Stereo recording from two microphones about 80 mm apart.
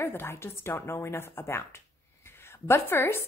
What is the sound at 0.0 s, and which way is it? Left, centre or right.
A woman's voice, left.